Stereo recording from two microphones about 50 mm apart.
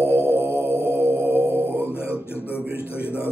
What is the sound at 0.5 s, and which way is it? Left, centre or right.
Mantra, left.